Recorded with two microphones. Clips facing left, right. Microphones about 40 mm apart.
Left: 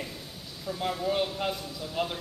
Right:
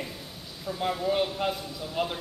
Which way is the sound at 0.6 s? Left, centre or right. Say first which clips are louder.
Right 2 dB; centre.